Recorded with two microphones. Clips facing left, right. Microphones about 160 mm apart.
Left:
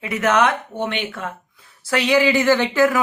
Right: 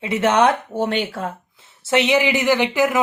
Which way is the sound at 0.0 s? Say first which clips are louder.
Right 2 dB; 25° right (ahead or behind).